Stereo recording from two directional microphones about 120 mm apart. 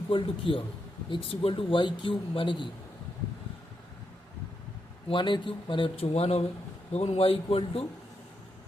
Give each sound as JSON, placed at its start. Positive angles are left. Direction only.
{"t": 0.1, "sound": "speech", "side_deg": 45}
{"t": 5.0, "sound": "speech", "side_deg": 40}